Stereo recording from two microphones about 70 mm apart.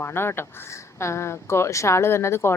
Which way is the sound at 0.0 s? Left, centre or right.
Left.